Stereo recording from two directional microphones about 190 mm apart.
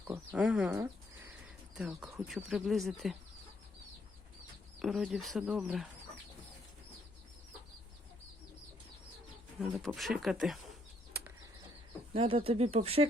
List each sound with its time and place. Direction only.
0.1 s speech: 10° right (ahead or behind)
4.8 s speech: centre (ahead or behind)
9.6 s speech: centre (ahead or behind)
12.1 s speech: 30° right (ahead or behind)